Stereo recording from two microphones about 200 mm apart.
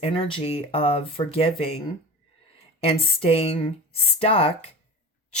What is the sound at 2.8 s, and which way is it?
Speech, 25° left (ahead or behind).